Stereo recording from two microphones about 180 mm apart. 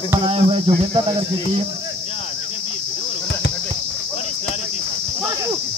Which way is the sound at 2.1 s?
35° left (ahead or behind).